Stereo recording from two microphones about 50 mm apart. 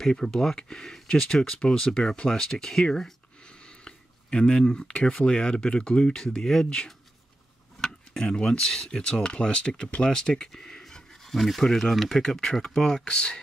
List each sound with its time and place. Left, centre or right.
0.0 s speech: centre
3.8 s a sound: centre
5.2 s speech: centre